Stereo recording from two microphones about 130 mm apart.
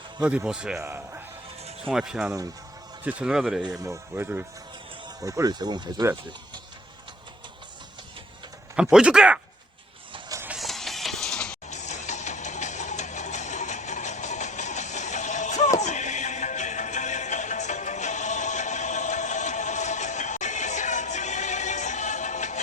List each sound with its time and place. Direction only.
0.2 s speech: 10° right (ahead or behind)
1.8 s speech: 5° right (ahead or behind)
3.8 s speech: 15° right (ahead or behind)
5.0 s speech: 25° right (ahead or behind)
8.7 s speech: 5° right (ahead or behind)
10.1 s vehicle: 30° right (ahead or behind)
10.6 s a sound: centre (ahead or behind)
11.7 s a sound: 65° left (ahead or behind)